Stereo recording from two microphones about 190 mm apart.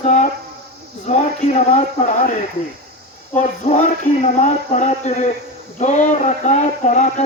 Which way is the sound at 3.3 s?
40° left (ahead or behind).